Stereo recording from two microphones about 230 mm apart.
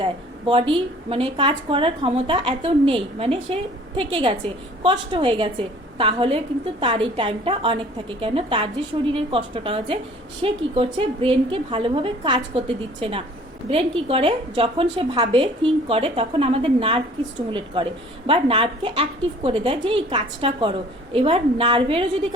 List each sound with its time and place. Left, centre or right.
0.0 s a woman's voice: right